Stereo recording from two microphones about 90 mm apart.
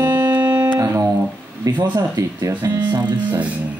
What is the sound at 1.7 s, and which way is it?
Speech, 45° right (ahead or behind).